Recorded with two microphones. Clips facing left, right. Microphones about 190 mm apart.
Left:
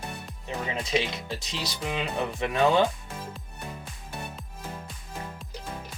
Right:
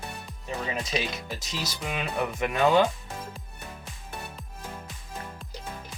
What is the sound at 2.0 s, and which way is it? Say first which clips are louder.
Speech: right 1 dB; 30° left (ahead or behind).